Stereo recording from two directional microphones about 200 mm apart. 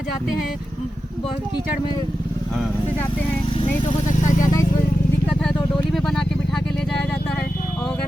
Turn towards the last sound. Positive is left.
turn(degrees=0)  # may be behind; listen again after turning